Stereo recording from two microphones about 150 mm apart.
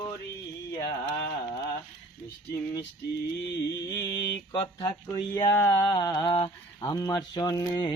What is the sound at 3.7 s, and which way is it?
Mantra, 25° left (ahead or behind).